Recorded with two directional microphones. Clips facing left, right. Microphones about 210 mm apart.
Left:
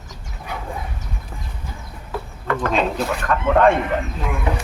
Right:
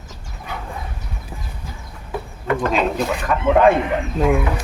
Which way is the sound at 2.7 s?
5° right (ahead or behind).